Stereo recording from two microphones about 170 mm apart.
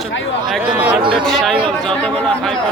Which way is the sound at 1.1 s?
Centre (ahead or behind).